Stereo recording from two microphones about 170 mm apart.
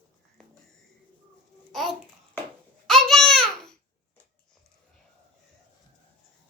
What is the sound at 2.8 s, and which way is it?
Babbling, centre (ahead or behind).